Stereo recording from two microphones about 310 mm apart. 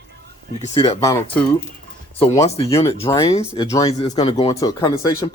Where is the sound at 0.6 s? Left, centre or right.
Centre.